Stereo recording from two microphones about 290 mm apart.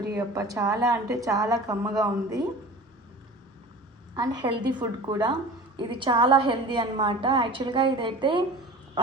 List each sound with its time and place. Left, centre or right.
0.2 s a woman's voice: centre
4.1 s a woman's voice: centre